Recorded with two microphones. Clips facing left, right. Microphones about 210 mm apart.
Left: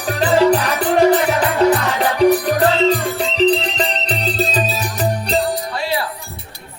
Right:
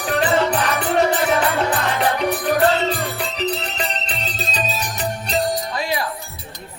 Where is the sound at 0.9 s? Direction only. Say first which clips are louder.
Left 5 dB; 35° left (ahead or behind).